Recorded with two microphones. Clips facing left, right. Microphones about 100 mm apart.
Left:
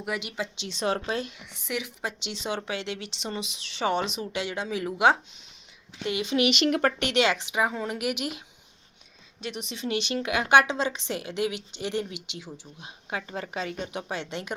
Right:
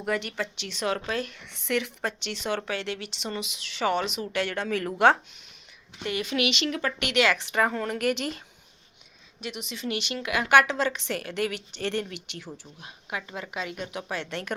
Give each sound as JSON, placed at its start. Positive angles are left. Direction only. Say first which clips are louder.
{"t": 0.0, "sound": "speech", "louder": "right 3 dB", "side_deg": 10}
{"t": 0.6, "sound": "a woman's voice", "louder": "left 2 dB", "side_deg": 25}
{"t": 6.1, "sound": "a woman's voice", "louder": "left 2 dB", "side_deg": 25}
{"t": 6.5, "sound": "speech", "louder": "left 5 dB", "side_deg": 50}
{"t": 7.0, "sound": "speech", "louder": "even", "side_deg": 25}
{"t": 9.4, "sound": "a woman's voice", "louder": "left 1 dB", "side_deg": 35}
{"t": 12.8, "sound": "a woman's voice", "louder": "left 1 dB", "side_deg": 25}